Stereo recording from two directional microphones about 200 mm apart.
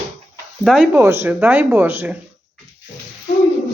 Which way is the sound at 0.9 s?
10° right (ahead or behind).